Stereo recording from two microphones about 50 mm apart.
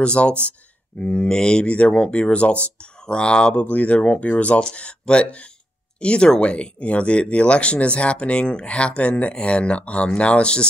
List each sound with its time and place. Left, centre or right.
0.0 s speech: left
3.6 s speech: left